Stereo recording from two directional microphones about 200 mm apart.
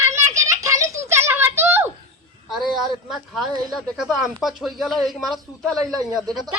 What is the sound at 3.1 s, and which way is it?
Speech, centre (ahead or behind).